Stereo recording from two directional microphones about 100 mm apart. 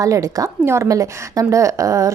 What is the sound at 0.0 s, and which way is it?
A woman's voice, 35° right (ahead or behind).